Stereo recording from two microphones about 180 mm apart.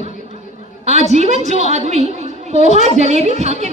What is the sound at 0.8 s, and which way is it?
A woman's voice, 40° right (ahead or behind).